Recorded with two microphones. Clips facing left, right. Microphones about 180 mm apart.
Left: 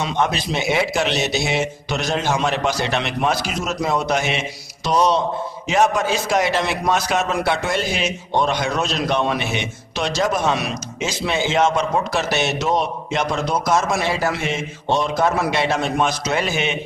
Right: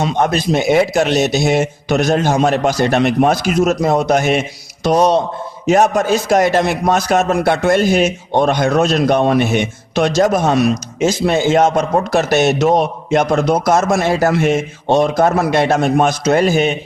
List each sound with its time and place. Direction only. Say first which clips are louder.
0.0 s a man's voice: right 6 dB; 45° right (ahead or behind)